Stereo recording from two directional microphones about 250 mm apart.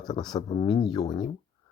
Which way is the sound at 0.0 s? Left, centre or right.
Centre.